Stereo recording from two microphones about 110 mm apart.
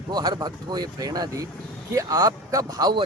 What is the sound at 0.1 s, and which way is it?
A man's voice, 40° right (ahead or behind).